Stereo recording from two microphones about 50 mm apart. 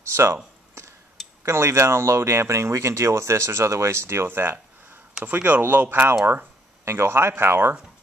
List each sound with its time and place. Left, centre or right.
0.1 s speech: right
1.4 s speech: right
5.2 s speech: right
6.8 s speech: right